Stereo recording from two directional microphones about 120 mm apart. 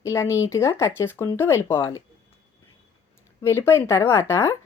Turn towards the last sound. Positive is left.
turn(degrees=20)  # may be behind; listen again after turning